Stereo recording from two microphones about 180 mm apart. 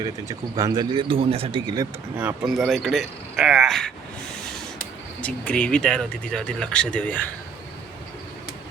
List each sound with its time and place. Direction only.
0.0 s speech: 20° right (ahead or behind)
2.1 s speech: 5° right (ahead or behind)
5.2 s speech: 5° left (ahead or behind)